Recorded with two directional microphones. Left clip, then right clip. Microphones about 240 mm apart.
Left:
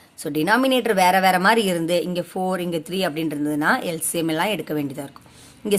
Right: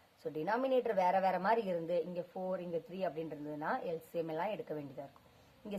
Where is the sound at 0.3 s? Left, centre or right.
Left.